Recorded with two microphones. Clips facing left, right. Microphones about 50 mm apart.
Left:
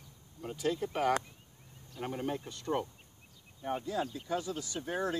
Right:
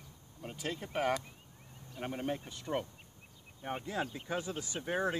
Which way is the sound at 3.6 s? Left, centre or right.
Right.